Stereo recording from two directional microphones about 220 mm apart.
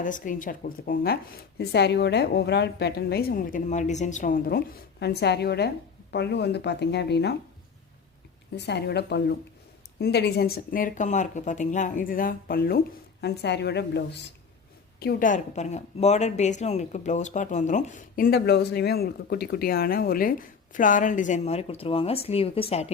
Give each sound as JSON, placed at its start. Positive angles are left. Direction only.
{"t": 0.0, "sound": "speech", "side_deg": 35}
{"t": 8.5, "sound": "speech", "side_deg": 50}